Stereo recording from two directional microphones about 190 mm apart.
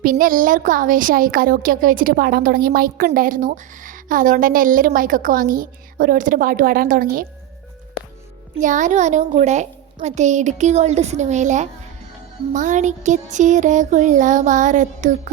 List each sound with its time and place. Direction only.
0.0 s speech: 45° right (ahead or behind)
8.5 s a child's voice: 40° right (ahead or behind)